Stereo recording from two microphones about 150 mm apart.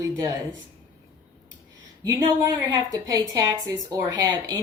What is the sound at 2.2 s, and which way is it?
A woman's voice, 25° right (ahead or behind).